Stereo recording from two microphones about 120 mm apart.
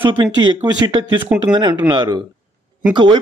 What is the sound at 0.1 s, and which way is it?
A man's voice, 40° right (ahead or behind).